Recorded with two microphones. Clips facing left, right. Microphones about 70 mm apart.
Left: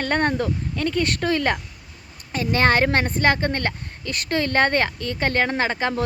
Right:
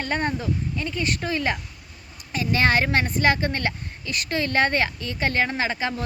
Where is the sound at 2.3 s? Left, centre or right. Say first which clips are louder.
Left 2 dB; left.